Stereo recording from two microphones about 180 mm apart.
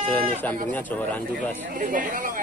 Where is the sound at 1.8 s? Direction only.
45° right (ahead or behind).